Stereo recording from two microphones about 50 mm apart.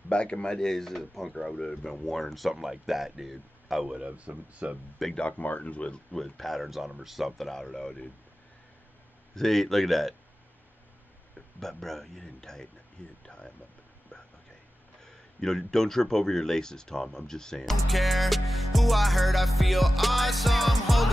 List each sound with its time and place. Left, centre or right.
0.1 s speech: left; by 3.9 s centre
3.9 s speech: right
5.1 s speech: left
6.1 s speech: centre
9.3 s speech: centre
11.6 s speech: centre
13.0 s speech: left
15.4 s speech: centre
17.8 s speech: centre